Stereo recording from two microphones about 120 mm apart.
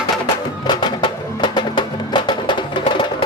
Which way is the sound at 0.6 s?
40° left (ahead or behind).